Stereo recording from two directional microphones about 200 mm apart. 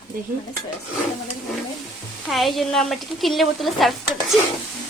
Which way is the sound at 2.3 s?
Centre (ahead or behind).